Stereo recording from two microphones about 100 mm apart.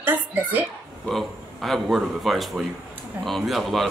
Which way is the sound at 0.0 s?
20° right (ahead or behind).